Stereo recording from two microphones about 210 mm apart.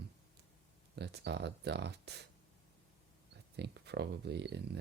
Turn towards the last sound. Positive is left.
turn(degrees=-55)  # may be behind; listen again after turning